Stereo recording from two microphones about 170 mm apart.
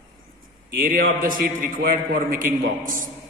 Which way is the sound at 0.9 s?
55° right (ahead or behind).